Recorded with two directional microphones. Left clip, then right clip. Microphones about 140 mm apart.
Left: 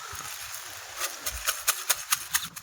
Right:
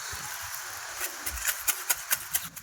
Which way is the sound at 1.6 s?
15° left (ahead or behind).